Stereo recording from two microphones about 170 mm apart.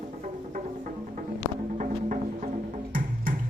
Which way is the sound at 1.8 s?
45° right (ahead or behind).